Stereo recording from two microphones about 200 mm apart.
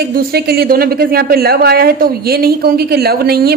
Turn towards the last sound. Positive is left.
turn(degrees=-50)  # may be behind; listen again after turning